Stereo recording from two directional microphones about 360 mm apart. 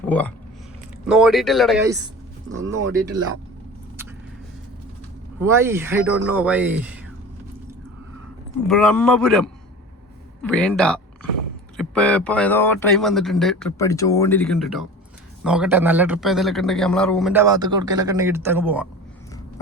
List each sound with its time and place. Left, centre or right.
0.0 s a man's voice: centre
2.6 s speech: right
5.4 s a man's voice: centre
8.6 s a man's voice: centre